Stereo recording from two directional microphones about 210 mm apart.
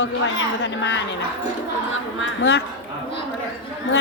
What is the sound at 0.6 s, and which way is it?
Speech, 55° left (ahead or behind).